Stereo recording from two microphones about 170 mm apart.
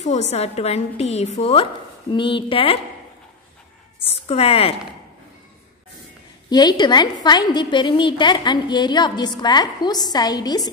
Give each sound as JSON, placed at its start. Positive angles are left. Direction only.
{"t": 0.0, "sound": "a woman's voice", "side_deg": 40}
{"t": 4.0, "sound": "a woman's voice", "side_deg": 35}
{"t": 6.5, "sound": "a woman's voice", "side_deg": 25}